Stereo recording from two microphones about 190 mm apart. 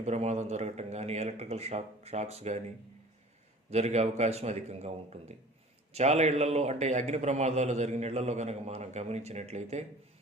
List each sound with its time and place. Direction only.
0.0 s a man's voice: 35° right (ahead or behind)
3.7 s a man's voice: 35° right (ahead or behind)